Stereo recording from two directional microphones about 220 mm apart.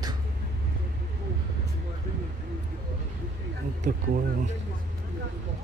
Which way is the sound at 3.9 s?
40° right (ahead or behind).